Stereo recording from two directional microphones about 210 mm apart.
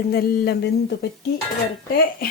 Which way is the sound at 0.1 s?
45° left (ahead or behind).